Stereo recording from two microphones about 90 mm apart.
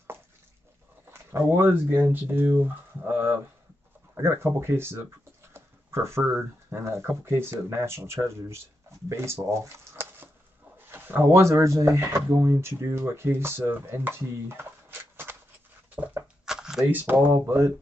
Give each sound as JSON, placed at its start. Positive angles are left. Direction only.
{"t": 1.1, "sound": "speech", "side_deg": -30}
{"t": 5.5, "sound": "a sound", "side_deg": -30}
{"t": 6.7, "sound": "speech", "side_deg": -30}
{"t": 16.4, "sound": "shuffling cards", "side_deg": -5}
{"t": 16.9, "sound": "speech", "side_deg": -20}
{"t": 17.3, "sound": "speech", "side_deg": -30}